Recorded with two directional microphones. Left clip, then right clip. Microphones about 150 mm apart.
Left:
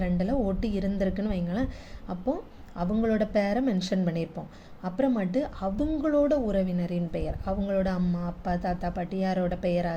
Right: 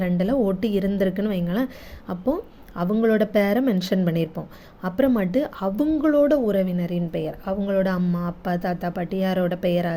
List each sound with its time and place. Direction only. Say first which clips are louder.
0.0 s a woman's voice: right 6 dB; 35° right (ahead or behind)